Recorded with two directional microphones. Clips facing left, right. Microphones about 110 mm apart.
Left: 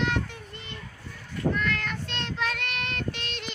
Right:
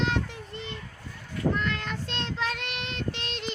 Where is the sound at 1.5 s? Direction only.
25° right (ahead or behind).